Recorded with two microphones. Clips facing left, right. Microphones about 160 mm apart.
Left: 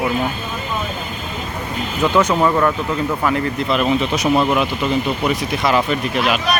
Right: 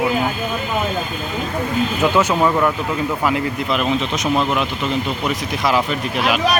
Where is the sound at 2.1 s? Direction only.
5° right (ahead or behind).